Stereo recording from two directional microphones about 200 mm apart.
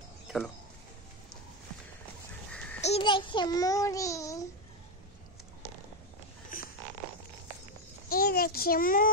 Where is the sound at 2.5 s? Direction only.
5° left (ahead or behind).